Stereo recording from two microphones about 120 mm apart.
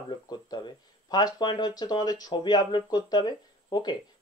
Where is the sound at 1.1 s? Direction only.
35° left (ahead or behind).